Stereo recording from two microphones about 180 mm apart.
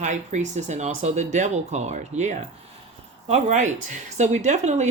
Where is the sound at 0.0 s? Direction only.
40° right (ahead or behind).